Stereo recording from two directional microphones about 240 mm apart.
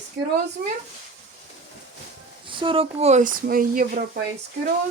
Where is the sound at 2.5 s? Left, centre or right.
Right.